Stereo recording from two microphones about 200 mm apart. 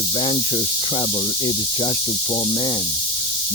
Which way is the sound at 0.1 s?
25° left (ahead or behind).